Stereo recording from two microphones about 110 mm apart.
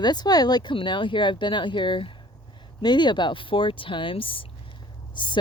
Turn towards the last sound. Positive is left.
turn(degrees=45)  # may be behind; listen again after turning